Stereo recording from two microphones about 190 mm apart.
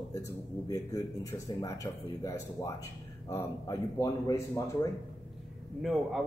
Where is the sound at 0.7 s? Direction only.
15° left (ahead or behind).